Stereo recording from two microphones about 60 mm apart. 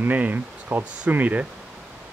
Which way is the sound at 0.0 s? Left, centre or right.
Right.